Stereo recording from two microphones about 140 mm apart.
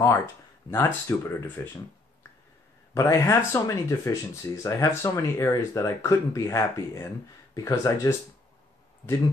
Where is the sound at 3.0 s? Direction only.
20° left (ahead or behind).